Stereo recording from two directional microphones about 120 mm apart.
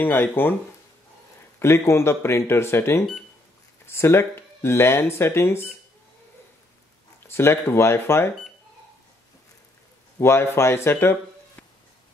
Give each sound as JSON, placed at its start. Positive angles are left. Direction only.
{"t": 0.0, "sound": "speech", "side_deg": 15}
{"t": 1.6, "sound": "speech", "side_deg": 20}
{"t": 7.2, "sound": "speech", "side_deg": 20}
{"t": 10.2, "sound": "speech", "side_deg": 20}